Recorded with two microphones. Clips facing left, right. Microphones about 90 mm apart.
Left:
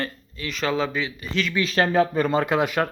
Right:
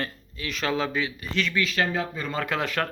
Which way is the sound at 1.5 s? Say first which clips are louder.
Left 8 dB; 30° left (ahead or behind).